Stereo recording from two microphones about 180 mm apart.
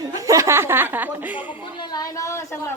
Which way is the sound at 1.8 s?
20° left (ahead or behind).